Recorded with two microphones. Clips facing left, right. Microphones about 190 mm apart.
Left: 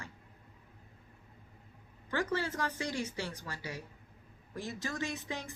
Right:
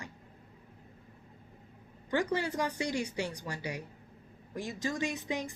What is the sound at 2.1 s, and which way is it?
Speech, 15° right (ahead or behind).